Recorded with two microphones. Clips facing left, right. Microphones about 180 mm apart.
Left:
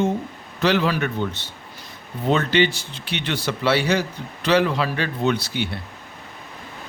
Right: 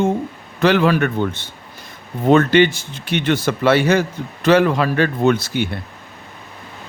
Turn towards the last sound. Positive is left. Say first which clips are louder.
# right 6 dB
turn(degrees=-50)  # may be behind; listen again after turning